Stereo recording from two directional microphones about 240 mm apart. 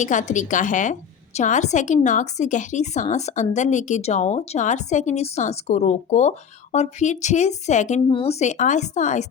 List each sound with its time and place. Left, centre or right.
0.0 s a woman's voice: left